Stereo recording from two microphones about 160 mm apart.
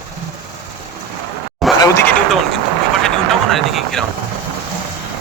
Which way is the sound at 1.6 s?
Centre (ahead or behind).